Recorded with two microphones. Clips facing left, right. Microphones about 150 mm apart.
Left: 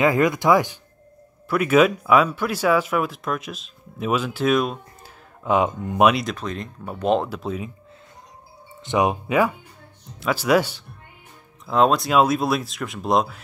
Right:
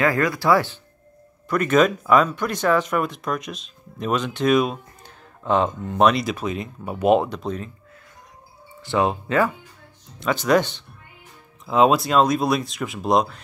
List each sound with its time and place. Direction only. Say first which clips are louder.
0.0 s speech: left 2 dB; 20° left (ahead or behind)
6.2 s speech: right 3 dB; 5° right (ahead or behind)
7.2 s speech: even; 5° left (ahead or behind)
8.8 s speech: left 1 dB; 15° left (ahead or behind)
11.6 s speech: right 1 dB; centre (ahead or behind)